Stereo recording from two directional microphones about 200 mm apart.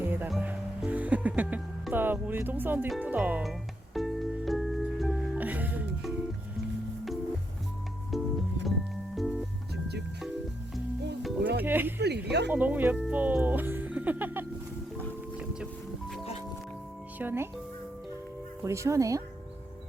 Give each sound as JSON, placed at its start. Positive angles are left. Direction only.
{"t": 0.0, "sound": "music", "side_deg": -10}
{"t": 8.1, "sound": "music", "side_deg": 0}
{"t": 11.6, "sound": "speech", "side_deg": -10}
{"t": 11.9, "sound": "speech", "side_deg": -55}
{"t": 12.5, "sound": "speech", "side_deg": -10}
{"t": 17.2, "sound": "speech", "side_deg": -10}
{"t": 18.6, "sound": "speech", "side_deg": -15}